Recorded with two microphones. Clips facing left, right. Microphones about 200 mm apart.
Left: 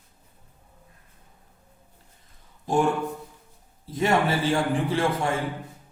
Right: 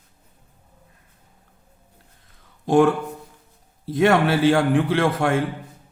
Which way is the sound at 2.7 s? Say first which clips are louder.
Right 6 dB; 75° right (ahead or behind).